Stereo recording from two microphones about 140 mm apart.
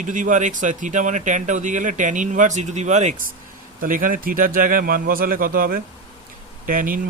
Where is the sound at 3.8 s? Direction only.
75° right (ahead or behind).